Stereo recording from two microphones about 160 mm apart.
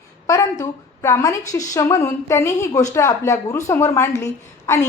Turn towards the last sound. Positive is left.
turn(degrees=15)  # may be behind; listen again after turning